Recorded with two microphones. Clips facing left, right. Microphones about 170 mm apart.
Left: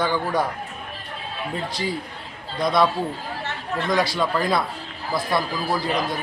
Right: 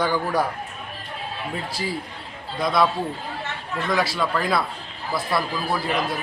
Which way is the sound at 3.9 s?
Centre (ahead or behind).